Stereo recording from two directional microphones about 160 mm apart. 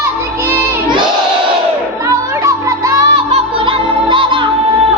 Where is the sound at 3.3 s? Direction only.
35° right (ahead or behind).